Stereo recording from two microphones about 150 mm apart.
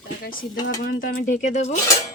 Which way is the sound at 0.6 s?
80° left.